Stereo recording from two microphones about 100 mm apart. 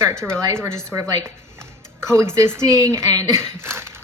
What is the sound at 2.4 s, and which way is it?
A woman's voice, 30° right (ahead or behind).